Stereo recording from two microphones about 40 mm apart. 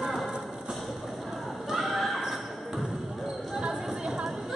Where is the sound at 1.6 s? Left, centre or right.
Centre.